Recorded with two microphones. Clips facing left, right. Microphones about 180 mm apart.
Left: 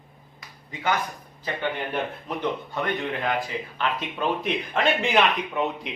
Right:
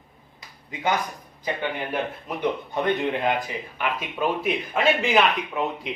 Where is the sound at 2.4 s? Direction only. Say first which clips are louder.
Right 3 dB; 20° right (ahead or behind); by 5.9 s centre (ahead or behind).